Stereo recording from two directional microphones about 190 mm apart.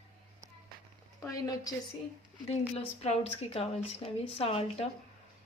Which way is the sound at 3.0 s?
30° left (ahead or behind).